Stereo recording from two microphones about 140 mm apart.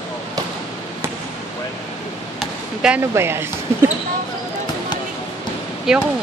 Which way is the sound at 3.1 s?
15° right (ahead or behind).